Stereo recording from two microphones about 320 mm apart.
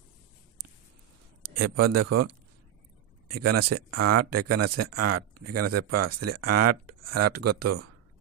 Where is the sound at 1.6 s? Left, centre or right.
Right.